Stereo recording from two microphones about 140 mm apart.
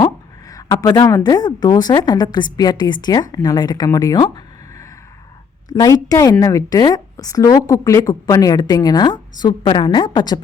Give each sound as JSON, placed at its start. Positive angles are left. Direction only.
{"t": 0.0, "sound": "a woman's voice", "side_deg": 25}